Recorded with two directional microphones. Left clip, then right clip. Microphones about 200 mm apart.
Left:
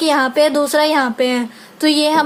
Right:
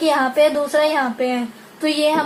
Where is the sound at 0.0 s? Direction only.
40° left (ahead or behind).